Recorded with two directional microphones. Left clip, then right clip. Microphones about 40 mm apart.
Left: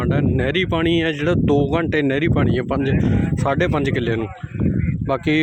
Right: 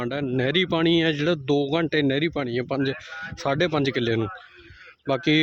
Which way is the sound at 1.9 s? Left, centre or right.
Centre.